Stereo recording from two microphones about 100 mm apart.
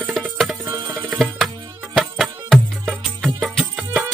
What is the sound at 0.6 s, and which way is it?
Music, 40° right (ahead or behind).